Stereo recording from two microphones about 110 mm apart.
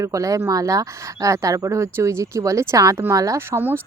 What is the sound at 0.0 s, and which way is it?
Speech, 30° right (ahead or behind).